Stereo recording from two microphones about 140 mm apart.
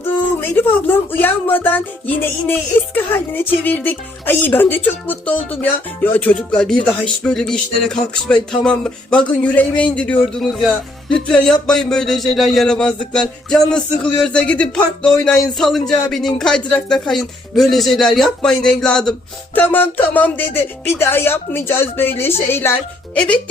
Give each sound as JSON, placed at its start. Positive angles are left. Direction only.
{"t": 0.3, "sound": "speech", "side_deg": 15}